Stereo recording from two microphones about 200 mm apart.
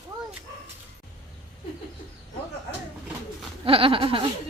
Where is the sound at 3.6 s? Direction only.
25° right (ahead or behind).